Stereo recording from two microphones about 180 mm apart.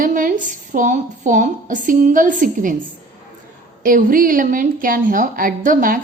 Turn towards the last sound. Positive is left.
turn(degrees=-50)  # may be behind; listen again after turning